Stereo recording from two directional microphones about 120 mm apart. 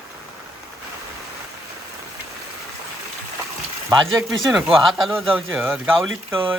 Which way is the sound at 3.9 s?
30° right (ahead or behind).